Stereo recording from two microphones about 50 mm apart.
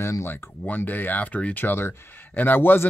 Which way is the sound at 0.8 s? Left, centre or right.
Left.